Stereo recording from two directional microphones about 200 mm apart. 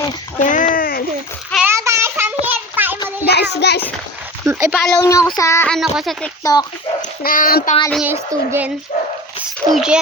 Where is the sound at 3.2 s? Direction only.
55° left (ahead or behind).